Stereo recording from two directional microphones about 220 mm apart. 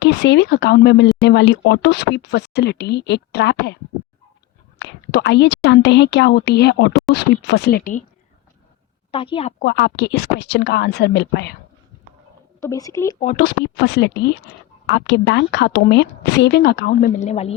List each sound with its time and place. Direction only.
0.0 s speech: 55° left (ahead or behind)
4.8 s speech: 50° left (ahead or behind)
9.1 s a woman's voice: 25° left (ahead or behind)
9.6 s speech: 50° left (ahead or behind)
12.5 s speech: 15° left (ahead or behind)
13.1 s speech: 40° left (ahead or behind)
17.2 s a woman's voice: 30° left (ahead or behind)